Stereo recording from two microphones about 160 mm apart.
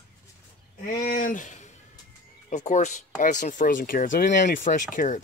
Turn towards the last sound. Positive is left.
turn(degrees=55)  # may be behind; listen again after turning